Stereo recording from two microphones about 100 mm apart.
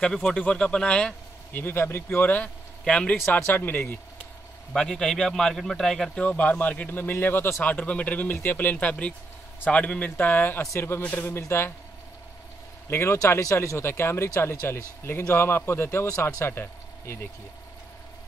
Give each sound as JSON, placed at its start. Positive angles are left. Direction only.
{"t": 0.0, "sound": "a man's voice", "side_deg": 5}
{"t": 3.4, "sound": "speech", "side_deg": 20}
{"t": 4.7, "sound": "a man's voice", "side_deg": 5}
{"t": 12.9, "sound": "speech", "side_deg": 30}